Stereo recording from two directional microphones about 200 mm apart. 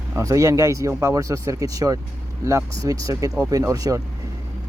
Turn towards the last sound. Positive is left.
turn(degrees=-15)  # may be behind; listen again after turning